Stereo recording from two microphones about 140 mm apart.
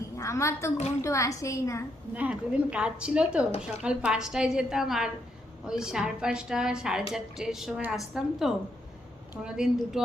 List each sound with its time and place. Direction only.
0.2 s a woman's voice: 20° left (ahead or behind)
2.1 s a woman's voice: 10° right (ahead or behind)